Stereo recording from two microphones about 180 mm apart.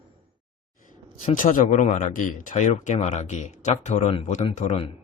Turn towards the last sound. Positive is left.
turn(degrees=35)  # may be behind; listen again after turning